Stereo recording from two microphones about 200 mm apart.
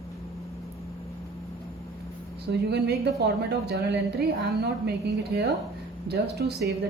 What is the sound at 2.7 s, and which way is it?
A woman's voice, 55° right (ahead or behind).